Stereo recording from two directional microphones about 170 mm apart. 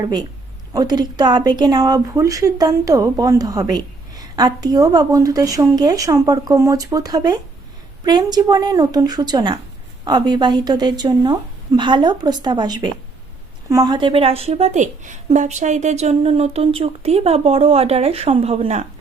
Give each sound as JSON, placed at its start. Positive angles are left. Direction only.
{"t": 0.0, "sound": "a woman's voice", "side_deg": -25}